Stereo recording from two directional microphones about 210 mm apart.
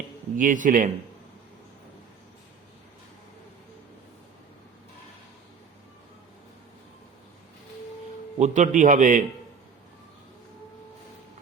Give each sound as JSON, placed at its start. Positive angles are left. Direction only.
{"t": 0.3, "sound": "a man's voice", "side_deg": -40}
{"t": 8.4, "sound": "a man's voice", "side_deg": -35}